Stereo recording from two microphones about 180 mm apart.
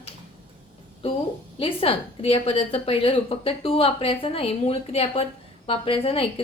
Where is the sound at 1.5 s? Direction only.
30° left (ahead or behind).